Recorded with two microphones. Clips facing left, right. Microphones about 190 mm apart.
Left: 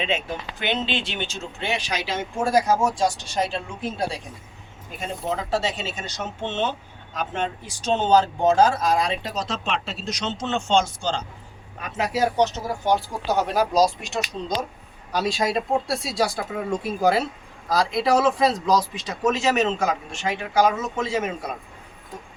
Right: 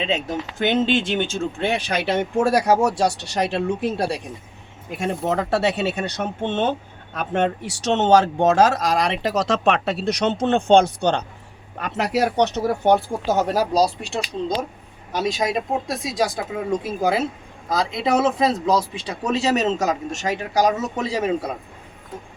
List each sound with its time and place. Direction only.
0.6 s speech: 45° right (ahead or behind)
15.1 s speech: 20° right (ahead or behind)
17.7 s speech: 20° right (ahead or behind)